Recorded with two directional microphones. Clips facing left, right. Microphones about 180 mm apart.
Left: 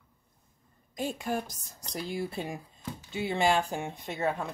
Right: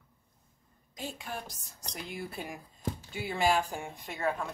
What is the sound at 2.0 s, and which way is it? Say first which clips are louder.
A woman's voice: left 6 dB; 30° left (ahead or behind).